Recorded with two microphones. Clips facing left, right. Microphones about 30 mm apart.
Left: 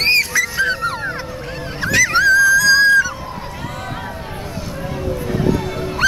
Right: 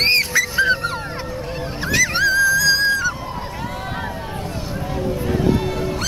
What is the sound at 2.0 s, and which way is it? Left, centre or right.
Music, centre.